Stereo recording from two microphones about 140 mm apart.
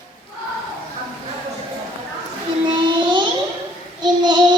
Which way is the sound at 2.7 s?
35° right (ahead or behind).